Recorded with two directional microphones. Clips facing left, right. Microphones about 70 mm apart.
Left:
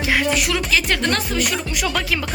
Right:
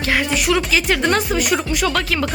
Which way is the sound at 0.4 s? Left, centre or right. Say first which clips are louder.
Right 3 dB; centre.